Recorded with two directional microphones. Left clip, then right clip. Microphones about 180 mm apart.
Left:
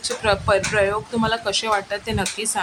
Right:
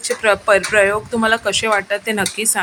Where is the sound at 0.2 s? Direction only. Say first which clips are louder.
Right 5 dB; 20° right (ahead or behind).